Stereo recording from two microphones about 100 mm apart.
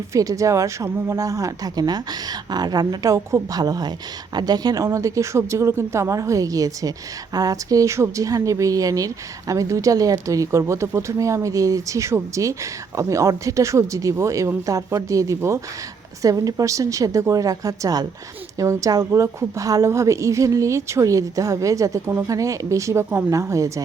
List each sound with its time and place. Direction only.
0.1 s a woman's voice: 35° right (ahead or behind)